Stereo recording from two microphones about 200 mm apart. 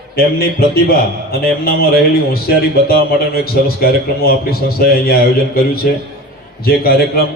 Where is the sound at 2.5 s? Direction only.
50° left (ahead or behind).